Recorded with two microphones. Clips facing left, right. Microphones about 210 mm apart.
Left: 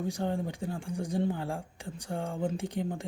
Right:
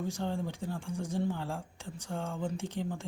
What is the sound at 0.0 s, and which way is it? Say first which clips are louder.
Speech: left 3 dB; 15° left (ahead or behind).